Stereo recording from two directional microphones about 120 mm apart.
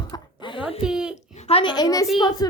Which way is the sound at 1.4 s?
60° left (ahead or behind).